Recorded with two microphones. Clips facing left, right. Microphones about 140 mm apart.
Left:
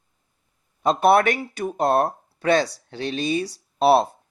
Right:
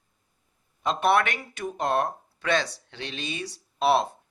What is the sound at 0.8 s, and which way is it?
Speech, 40° left (ahead or behind).